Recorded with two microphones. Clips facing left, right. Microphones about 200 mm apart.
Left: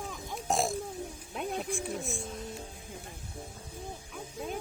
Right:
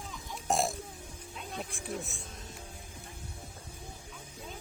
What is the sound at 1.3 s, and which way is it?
Music, 60° left (ahead or behind).